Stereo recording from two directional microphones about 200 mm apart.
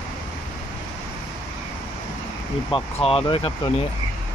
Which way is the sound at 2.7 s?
25° left (ahead or behind).